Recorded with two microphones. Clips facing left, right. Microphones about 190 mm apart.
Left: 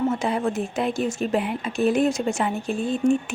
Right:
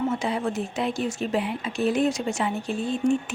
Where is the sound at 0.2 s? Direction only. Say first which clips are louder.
Left 3 dB; 50° left (ahead or behind).